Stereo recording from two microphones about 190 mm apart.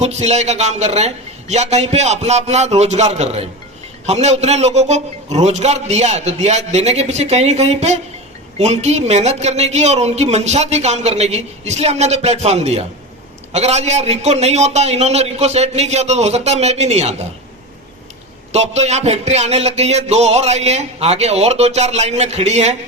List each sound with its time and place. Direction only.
0.0 s speech: 35° right (ahead or behind)
18.5 s speech: 35° right (ahead or behind)